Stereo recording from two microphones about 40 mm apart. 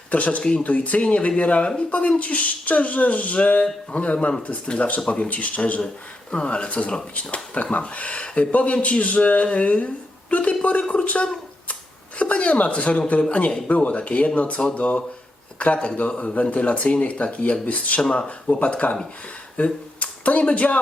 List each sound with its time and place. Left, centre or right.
0.1 s speech: left
5.3 s speech: left
6.3 s speech: left
12.2 s speech: left